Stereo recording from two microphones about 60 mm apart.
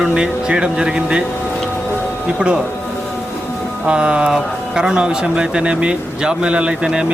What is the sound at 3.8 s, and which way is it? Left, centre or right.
Speech, centre.